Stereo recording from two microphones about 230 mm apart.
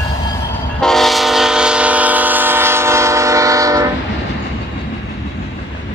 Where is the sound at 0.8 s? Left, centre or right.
Centre.